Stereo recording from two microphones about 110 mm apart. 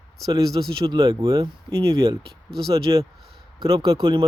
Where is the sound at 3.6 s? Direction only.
50° right (ahead or behind).